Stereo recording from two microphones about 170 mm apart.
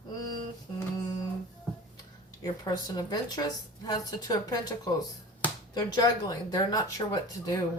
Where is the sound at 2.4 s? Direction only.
20° left (ahead or behind).